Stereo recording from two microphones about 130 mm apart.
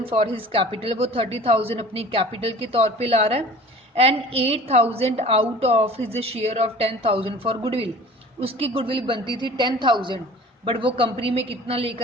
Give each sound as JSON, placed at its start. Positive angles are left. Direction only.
{"t": 0.0, "sound": "a woman's voice", "side_deg": -45}